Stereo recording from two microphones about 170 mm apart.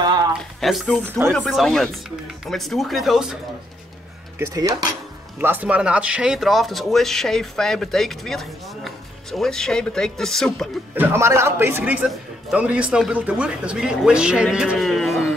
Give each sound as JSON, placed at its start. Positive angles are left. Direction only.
{"t": 0.4, "sound": "a sound", "side_deg": 0}
{"t": 1.0, "sound": "speech", "side_deg": -15}
{"t": 1.3, "sound": "speech", "side_deg": 0}
{"t": 4.4, "sound": "speech", "side_deg": -20}
{"t": 11.0, "sound": "speech", "side_deg": -15}